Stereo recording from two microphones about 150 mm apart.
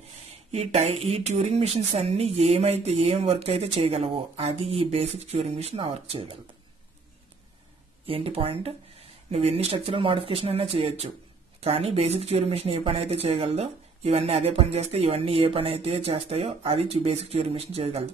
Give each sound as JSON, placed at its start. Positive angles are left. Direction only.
{"t": 0.5, "sound": "speech", "side_deg": -45}
{"t": 8.1, "sound": "speech", "side_deg": -40}